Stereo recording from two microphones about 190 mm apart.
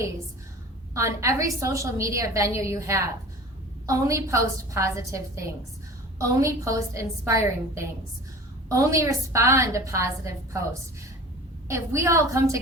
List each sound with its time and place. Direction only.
0.9 s a woman's voice: 15° right (ahead or behind)
11.7 s a woman's voice: 15° right (ahead or behind)